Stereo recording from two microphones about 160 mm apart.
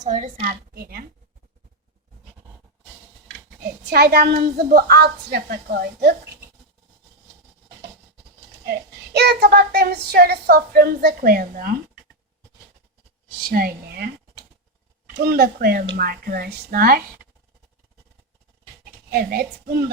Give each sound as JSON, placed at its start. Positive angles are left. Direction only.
{"t": 0.0, "sound": "a woman's voice", "side_deg": -50}
{"t": 3.8, "sound": "a child's voice", "side_deg": -90}
{"t": 9.1, "sound": "a child's voice", "side_deg": -90}
{"t": 13.4, "sound": "speech", "side_deg": -65}
{"t": 15.2, "sound": "a child's voice", "side_deg": -70}
{"t": 19.1, "sound": "a child's voice", "side_deg": -70}